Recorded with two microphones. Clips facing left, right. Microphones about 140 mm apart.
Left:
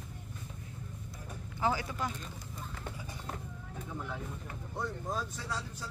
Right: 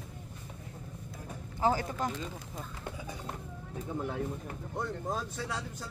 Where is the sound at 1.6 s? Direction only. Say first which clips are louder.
Right 3 dB; 45° right (ahead or behind).